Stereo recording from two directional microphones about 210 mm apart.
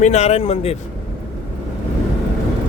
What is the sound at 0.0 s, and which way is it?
Speech, 30° left (ahead or behind).